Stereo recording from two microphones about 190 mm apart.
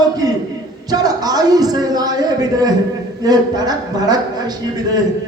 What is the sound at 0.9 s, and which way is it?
A man's voice, 20° right (ahead or behind).